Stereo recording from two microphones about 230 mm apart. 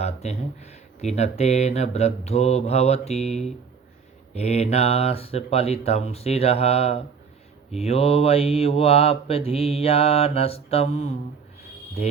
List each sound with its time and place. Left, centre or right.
0.0 s speech: left
1.0 s mantra: left